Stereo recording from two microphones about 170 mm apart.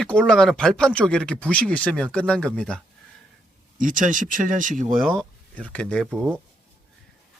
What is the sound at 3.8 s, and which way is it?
Speech, 50° right (ahead or behind).